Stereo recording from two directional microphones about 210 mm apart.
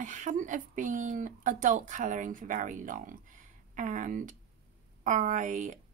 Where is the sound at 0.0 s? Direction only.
35° right (ahead or behind).